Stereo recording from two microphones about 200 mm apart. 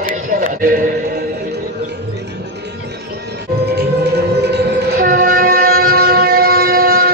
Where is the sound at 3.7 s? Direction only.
55° right (ahead or behind).